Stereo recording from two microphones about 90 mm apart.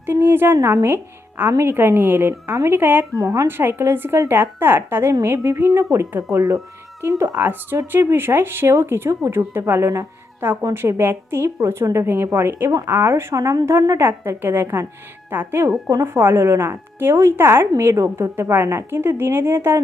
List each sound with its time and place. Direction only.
0.0 s a woman's voice: 25° right (ahead or behind)
3.2 s a woman's voice: 35° right (ahead or behind)
3.4 s a woman's voice: 25° right (ahead or behind)
7.3 s a woman's voice: 25° right (ahead or behind)
10.4 s a woman's voice: 25° right (ahead or behind)